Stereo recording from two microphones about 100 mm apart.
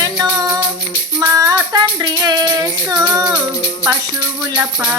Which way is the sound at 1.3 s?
35° right (ahead or behind).